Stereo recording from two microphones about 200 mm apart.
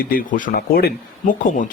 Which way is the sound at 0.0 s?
45° left (ahead or behind).